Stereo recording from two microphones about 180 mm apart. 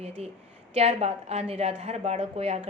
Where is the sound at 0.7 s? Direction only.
35° right (ahead or behind).